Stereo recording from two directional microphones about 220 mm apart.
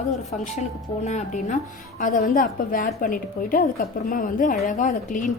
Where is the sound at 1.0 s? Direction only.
30° left (ahead or behind).